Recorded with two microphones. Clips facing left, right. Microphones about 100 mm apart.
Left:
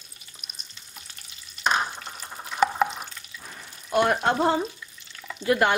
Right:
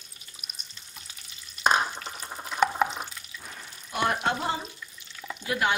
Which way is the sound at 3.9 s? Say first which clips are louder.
Left 5 dB; 50° left (ahead or behind).